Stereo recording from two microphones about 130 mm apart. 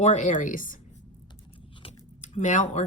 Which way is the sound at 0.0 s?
70° left (ahead or behind).